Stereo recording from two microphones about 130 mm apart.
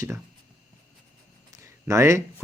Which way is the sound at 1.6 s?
20° right (ahead or behind).